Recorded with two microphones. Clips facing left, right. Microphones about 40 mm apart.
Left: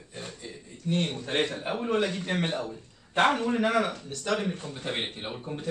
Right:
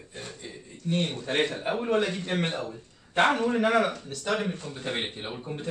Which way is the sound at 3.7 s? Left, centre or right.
Centre.